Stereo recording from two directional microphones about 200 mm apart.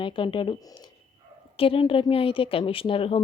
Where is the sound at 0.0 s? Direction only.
25° left (ahead or behind).